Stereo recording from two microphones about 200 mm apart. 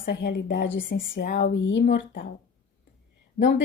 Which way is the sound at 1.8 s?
50° left (ahead or behind).